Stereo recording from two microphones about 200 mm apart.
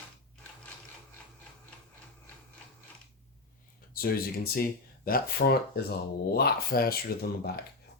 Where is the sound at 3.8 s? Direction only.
45° left (ahead or behind).